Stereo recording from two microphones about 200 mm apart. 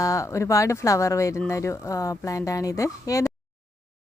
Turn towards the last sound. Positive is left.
turn(degrees=15)  # may be behind; listen again after turning